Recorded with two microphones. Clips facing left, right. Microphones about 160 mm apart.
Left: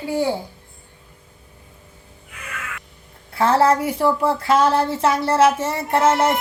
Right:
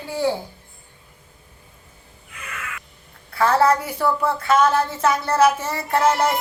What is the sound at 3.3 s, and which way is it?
A woman's voice, 25° left (ahead or behind).